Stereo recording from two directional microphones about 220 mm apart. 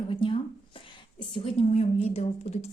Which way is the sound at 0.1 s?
25° left (ahead or behind).